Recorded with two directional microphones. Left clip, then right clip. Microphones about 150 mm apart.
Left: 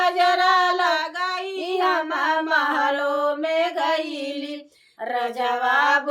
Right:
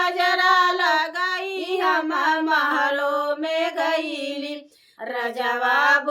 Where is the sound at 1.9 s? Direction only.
10° left (ahead or behind).